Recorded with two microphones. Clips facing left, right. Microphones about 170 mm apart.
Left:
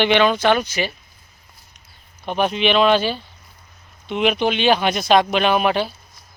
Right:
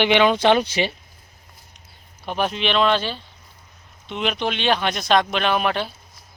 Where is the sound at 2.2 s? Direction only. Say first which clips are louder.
Left 4 dB; centre (ahead or behind).